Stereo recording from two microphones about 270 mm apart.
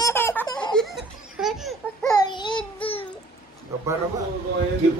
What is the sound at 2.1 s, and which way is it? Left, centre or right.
Babbling, centre.